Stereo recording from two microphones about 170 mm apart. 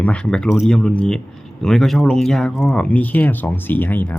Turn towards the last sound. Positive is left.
turn(degrees=10)  # may be behind; listen again after turning